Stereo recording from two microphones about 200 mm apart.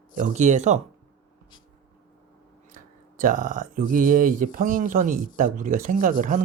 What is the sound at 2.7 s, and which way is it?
Speech, 40° right (ahead or behind).